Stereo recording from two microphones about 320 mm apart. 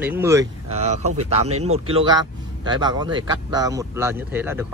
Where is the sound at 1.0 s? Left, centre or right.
Right.